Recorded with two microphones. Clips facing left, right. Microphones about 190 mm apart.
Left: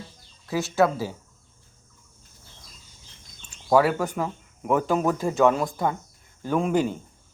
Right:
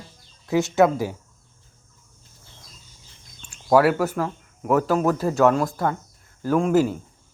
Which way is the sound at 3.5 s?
10° right (ahead or behind).